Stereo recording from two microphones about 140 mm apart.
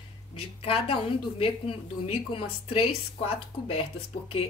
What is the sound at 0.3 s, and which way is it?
A woman's voice, 40° left (ahead or behind).